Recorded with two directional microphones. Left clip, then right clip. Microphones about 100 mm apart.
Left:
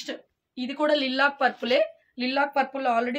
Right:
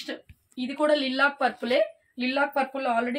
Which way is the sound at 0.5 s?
10° left (ahead or behind).